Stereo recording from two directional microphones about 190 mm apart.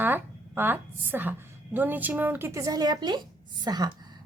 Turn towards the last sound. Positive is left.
turn(degrees=-20)  # may be behind; listen again after turning